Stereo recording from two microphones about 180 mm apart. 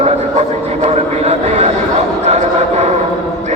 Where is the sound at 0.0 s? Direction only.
35° right (ahead or behind).